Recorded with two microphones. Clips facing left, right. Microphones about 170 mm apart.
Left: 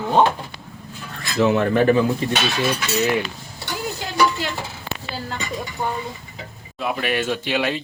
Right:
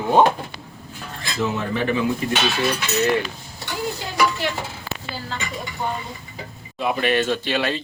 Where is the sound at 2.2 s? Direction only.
30° left (ahead or behind).